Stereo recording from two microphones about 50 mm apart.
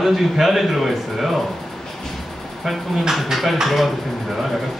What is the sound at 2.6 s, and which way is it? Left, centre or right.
A man's voice, centre.